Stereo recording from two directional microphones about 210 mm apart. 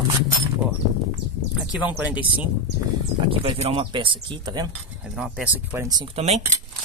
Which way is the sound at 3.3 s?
25° right (ahead or behind).